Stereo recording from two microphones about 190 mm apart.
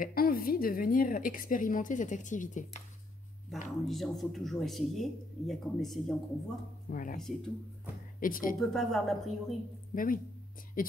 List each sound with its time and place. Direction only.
0.0 s a woman's voice: 50° left (ahead or behind)
3.8 s speech: centre (ahead or behind)
6.9 s a woman's voice: 45° left (ahead or behind)
7.2 s speech: centre (ahead or behind)
8.2 s a woman's voice: 45° left (ahead or behind)
8.5 s speech: centre (ahead or behind)
9.9 s a woman's voice: 45° left (ahead or behind)